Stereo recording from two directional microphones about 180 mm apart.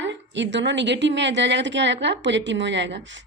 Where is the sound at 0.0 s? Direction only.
80° right.